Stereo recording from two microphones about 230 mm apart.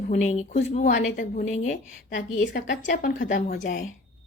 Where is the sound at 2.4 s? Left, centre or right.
Left.